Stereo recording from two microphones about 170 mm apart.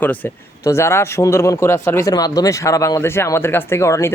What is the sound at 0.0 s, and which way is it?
Speech, 10° left (ahead or behind).